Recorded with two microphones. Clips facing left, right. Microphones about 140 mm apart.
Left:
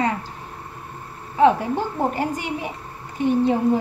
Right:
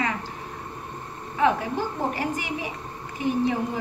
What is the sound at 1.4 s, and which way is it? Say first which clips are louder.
Speech: left 6 dB; 30° left (ahead or behind).